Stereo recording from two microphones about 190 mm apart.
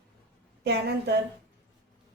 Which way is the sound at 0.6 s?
60° right (ahead or behind).